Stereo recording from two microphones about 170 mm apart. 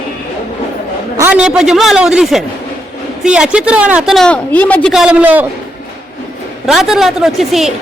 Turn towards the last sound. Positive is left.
turn(degrees=0)  # may be behind; listen again after turning